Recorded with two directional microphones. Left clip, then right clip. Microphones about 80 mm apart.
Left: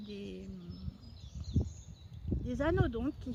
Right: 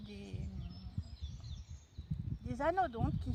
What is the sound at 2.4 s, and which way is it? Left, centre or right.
Speech, right.